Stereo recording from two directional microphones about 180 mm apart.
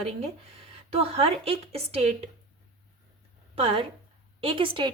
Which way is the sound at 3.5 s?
35° right (ahead or behind).